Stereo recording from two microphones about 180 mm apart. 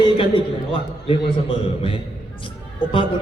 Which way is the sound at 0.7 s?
30° left (ahead or behind).